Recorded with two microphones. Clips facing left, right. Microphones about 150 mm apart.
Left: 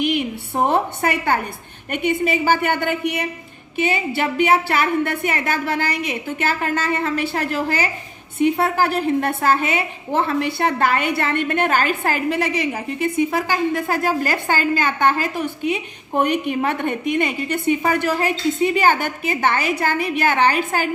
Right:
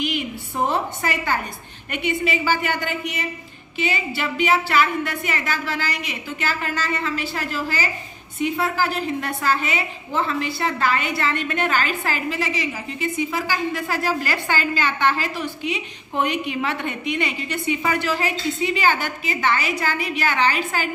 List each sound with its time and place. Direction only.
0.0 s a woman's voice: 60° left (ahead or behind)